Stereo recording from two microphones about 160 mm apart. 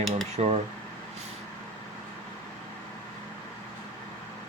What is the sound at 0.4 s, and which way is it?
Speech, 40° right (ahead or behind).